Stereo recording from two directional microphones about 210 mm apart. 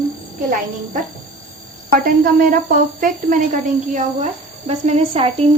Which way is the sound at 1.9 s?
45° right (ahead or behind).